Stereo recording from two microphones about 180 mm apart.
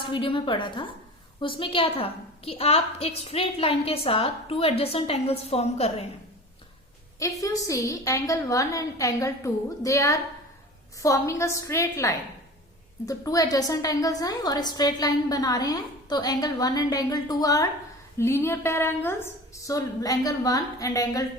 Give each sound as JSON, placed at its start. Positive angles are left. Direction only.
{"t": 0.0, "sound": "a woman's voice", "side_deg": 30}
{"t": 7.2, "sound": "a woman's voice", "side_deg": 20}